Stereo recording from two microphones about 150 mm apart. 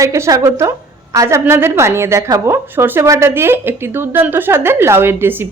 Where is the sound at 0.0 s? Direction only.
20° right (ahead or behind).